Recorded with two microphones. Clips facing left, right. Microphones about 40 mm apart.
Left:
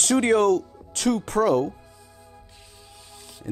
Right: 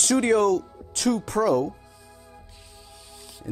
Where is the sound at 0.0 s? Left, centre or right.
Left.